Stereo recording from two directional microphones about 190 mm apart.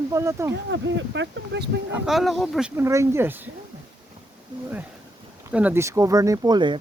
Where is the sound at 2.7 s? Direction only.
15° right (ahead or behind).